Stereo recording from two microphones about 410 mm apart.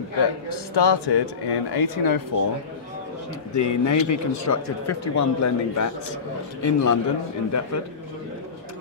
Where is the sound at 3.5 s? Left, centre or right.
Left.